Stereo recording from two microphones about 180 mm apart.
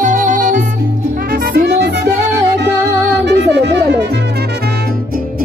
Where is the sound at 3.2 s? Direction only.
70° right (ahead or behind).